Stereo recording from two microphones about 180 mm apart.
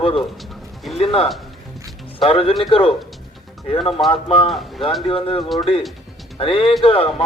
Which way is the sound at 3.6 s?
30° left (ahead or behind).